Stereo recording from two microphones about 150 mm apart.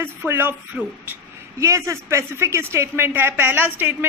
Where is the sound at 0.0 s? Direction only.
15° right (ahead or behind).